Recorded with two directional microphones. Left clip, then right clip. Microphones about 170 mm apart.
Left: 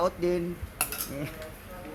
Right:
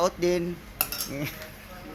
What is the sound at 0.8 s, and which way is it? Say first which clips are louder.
Cutlery: right 2 dB; 60° right (ahead or behind).